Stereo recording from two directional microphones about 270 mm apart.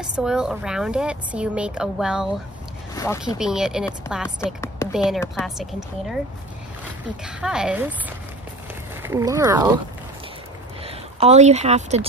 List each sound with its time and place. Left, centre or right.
0.0 s a woman's voice: centre
2.9 s speech: centre
3.3 s a woman's voice: centre
5.2 s a woman's voice: centre
7.2 s a woman's voice: centre
9.0 s speech: centre
10.8 s speech: right